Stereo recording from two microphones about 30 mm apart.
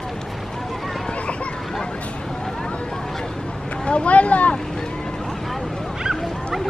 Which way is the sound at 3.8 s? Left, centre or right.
Left.